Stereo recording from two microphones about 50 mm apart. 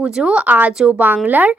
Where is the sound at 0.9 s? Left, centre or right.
Right.